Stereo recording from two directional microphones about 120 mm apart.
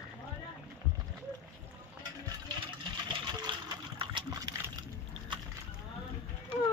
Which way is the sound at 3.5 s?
40° right (ahead or behind).